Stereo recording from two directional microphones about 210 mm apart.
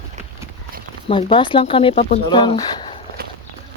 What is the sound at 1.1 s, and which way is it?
Speech, 25° left (ahead or behind).